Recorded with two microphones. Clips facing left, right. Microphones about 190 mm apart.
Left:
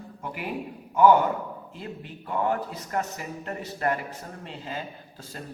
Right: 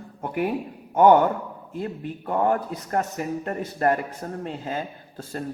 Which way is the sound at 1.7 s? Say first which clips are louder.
Right 8 dB; 50° right (ahead or behind).